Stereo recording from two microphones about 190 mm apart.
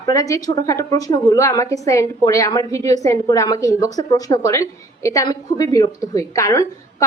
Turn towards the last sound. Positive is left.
turn(degrees=15)  # may be behind; listen again after turning